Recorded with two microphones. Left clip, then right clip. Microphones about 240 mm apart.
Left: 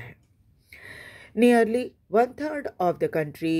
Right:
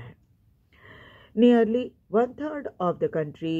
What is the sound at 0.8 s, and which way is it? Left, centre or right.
Speech, left.